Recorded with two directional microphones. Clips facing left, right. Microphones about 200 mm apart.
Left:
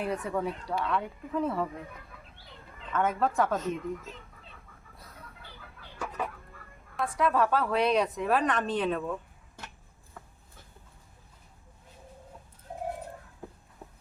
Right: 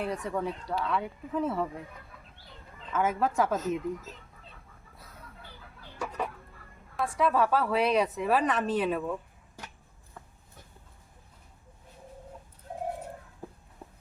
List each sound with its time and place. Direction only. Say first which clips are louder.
0.0 s a woman's voice: left 1 dB; centre (ahead or behind)
2.9 s a woman's voice: even; 5° right (ahead or behind)
6.9 s a woman's voice: right 1 dB; centre (ahead or behind)